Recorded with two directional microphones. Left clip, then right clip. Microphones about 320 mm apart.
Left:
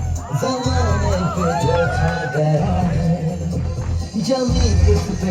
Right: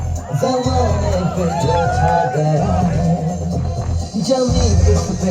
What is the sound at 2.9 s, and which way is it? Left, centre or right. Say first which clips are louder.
Music: right 3 dB; centre.